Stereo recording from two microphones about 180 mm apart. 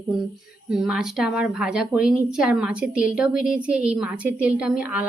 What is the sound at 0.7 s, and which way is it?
A woman's voice, 5° right (ahead or behind).